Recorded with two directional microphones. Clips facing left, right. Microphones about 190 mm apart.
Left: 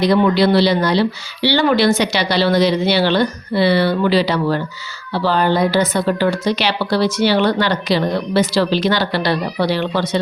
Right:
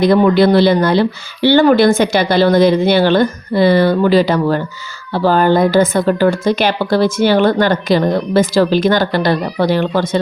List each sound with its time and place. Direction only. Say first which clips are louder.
0.0 s speech: right 4 dB; 50° right (ahead or behind)